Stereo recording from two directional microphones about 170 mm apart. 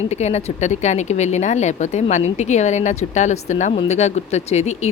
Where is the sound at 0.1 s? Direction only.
40° left (ahead or behind).